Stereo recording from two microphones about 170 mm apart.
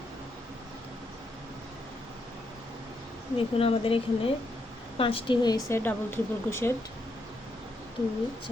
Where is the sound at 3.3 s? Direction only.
35° left (ahead or behind); by 6.7 s 15° left (ahead or behind).